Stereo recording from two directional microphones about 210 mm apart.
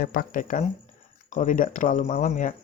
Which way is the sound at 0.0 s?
45° left (ahead or behind).